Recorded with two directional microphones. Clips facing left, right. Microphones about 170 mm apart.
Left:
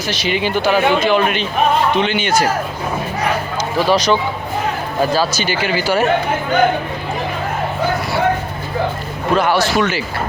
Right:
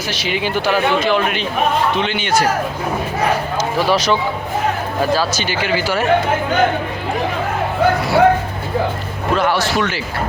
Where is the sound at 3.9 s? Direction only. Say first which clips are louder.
Left 2 dB; 5° right (ahead or behind).